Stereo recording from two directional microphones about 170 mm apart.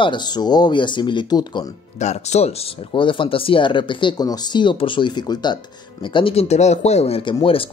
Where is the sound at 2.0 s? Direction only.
40° left (ahead or behind).